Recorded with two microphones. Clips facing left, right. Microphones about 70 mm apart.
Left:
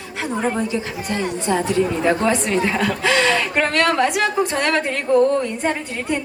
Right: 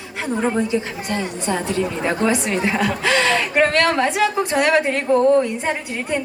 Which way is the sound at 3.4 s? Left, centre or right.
Centre.